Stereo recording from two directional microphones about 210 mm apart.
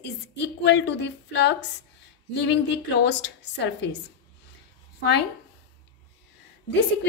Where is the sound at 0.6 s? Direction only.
55° left (ahead or behind).